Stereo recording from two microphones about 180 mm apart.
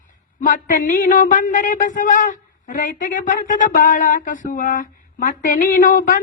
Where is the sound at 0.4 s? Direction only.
50° left (ahead or behind).